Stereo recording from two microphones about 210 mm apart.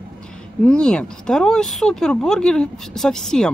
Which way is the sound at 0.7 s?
5° left (ahead or behind).